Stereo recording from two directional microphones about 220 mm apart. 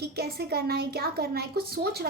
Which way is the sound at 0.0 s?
45° right (ahead or behind).